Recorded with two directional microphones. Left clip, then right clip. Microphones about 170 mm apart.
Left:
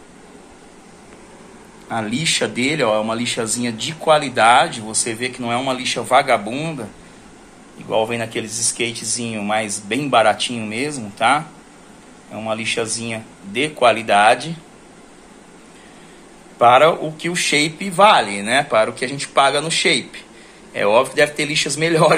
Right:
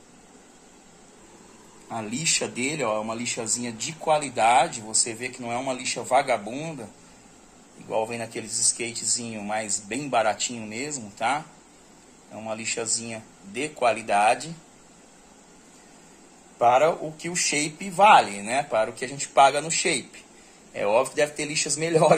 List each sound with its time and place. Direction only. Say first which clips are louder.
1.9 s speech: left 7 dB; 10° right (ahead or behind)
7.9 s speech: left 8 dB; 5° right (ahead or behind)
16.5 s speech: left 8 dB; 10° right (ahead or behind)